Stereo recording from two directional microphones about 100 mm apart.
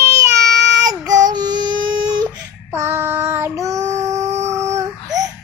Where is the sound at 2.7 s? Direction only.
25° right (ahead or behind).